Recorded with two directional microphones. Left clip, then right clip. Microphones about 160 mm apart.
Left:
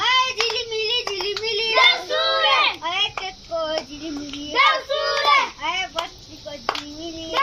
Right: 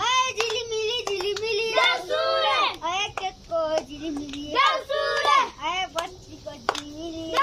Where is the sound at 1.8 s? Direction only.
30° right (ahead or behind).